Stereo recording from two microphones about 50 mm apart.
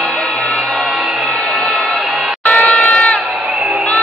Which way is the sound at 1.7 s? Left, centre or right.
Centre.